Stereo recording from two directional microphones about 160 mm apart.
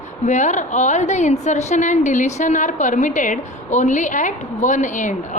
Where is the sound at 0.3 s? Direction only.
50° left (ahead or behind).